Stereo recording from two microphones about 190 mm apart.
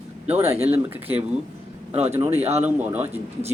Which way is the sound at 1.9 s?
35° right (ahead or behind).